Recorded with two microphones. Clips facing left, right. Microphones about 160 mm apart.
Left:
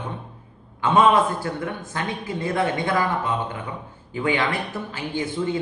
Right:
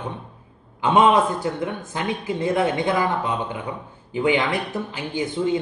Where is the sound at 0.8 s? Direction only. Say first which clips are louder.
Right 1 dB; 20° right (ahead or behind).